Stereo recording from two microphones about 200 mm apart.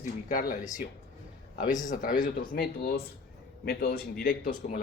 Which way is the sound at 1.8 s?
40° left (ahead or behind).